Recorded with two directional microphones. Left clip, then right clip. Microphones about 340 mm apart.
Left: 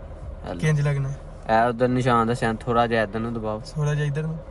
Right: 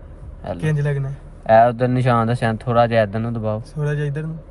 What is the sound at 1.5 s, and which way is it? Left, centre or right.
Speech, centre.